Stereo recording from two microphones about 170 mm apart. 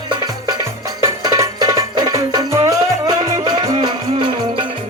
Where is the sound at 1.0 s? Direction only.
20° right (ahead or behind).